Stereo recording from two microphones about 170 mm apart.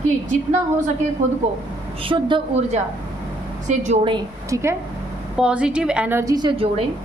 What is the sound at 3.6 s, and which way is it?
Speech, 45° right (ahead or behind).